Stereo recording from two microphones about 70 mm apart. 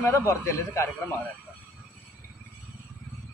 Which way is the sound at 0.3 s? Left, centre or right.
Left.